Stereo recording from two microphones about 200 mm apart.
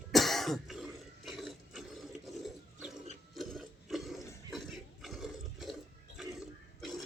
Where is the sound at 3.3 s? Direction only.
Centre (ahead or behind).